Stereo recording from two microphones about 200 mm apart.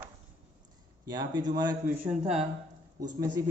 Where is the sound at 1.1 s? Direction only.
20° right (ahead or behind).